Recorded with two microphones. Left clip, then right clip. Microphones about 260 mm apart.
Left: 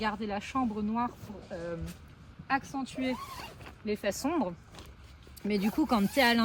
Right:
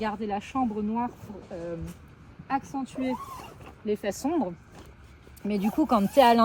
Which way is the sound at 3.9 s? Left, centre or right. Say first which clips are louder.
Right 3 dB; centre.